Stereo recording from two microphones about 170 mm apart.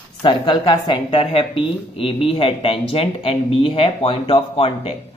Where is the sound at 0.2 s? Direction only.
25° left (ahead or behind).